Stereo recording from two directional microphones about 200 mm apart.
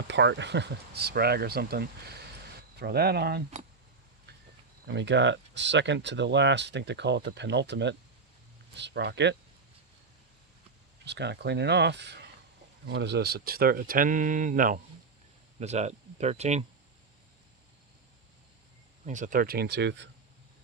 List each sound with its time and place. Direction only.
0.1 s speech: 60° right (ahead or behind)
4.3 s pig: 55° right (ahead or behind)
4.9 s speech: 60° right (ahead or behind)
11.0 s speech: 60° right (ahead or behind); by 16.6 s 35° right (ahead or behind)
19.0 s speech: 40° right (ahead or behind); by 20.1 s 60° right (ahead or behind)